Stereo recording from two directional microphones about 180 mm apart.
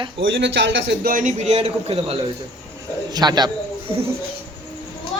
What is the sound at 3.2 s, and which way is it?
Speech, 20° right (ahead or behind).